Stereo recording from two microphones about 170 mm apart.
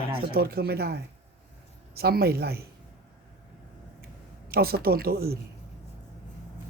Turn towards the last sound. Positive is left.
turn(degrees=-65)  # may be behind; listen again after turning